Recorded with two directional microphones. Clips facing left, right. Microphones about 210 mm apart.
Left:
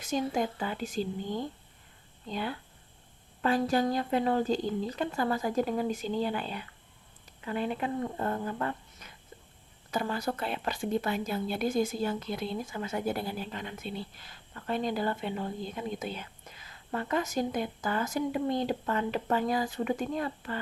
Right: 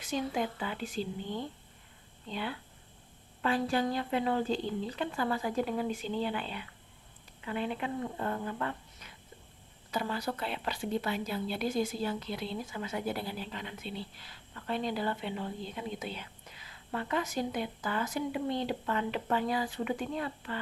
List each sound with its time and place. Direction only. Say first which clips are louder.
0.0 s a woman's voice: left 3 dB; 45° left (ahead or behind)